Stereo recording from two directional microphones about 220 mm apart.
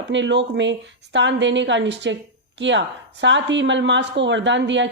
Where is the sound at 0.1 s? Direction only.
55° right (ahead or behind).